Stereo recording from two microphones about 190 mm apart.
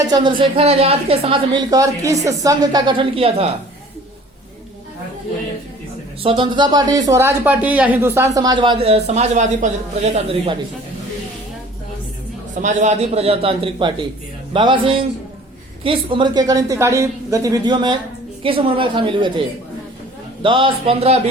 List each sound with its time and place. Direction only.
0.1 s a man's voice: 25° right (ahead or behind)
6.2 s a man's voice: 25° right (ahead or behind)
12.5 s a man's voice: 40° right (ahead or behind)